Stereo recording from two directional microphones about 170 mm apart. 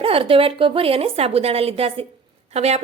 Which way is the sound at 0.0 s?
35° right (ahead or behind).